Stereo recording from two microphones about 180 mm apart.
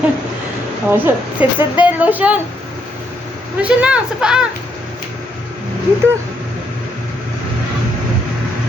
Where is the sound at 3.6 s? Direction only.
5° right (ahead or behind).